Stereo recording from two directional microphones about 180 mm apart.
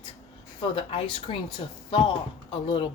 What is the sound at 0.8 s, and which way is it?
Speech, 30° left (ahead or behind).